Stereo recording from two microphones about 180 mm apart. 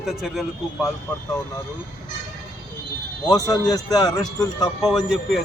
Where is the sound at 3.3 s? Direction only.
20° left (ahead or behind).